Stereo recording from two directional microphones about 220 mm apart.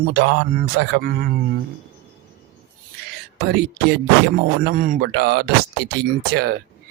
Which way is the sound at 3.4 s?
50° right (ahead or behind).